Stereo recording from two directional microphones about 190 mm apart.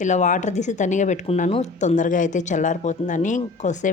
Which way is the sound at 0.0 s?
40° left (ahead or behind).